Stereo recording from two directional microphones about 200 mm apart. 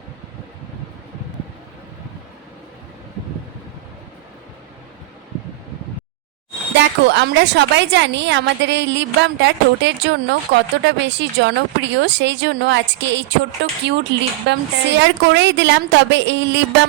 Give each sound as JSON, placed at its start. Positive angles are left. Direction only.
{"t": 6.7, "sound": "a woman's voice", "side_deg": -60}